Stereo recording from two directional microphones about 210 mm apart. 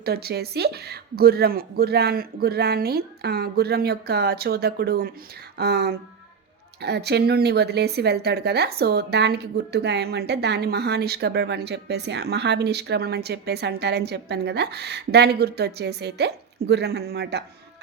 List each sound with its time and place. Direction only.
0.0 s speech: 50° right (ahead or behind)